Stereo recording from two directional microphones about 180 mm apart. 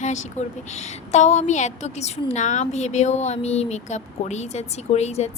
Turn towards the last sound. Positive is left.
turn(degrees=40)  # may be behind; listen again after turning